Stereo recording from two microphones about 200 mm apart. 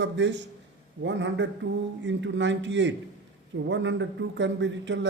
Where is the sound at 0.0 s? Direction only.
65° right (ahead or behind).